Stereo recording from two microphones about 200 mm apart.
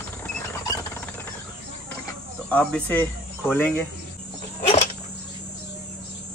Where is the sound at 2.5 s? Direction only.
5° left (ahead or behind).